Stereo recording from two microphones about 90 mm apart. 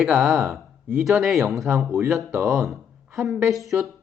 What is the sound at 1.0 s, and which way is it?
Speech, centre (ahead or behind).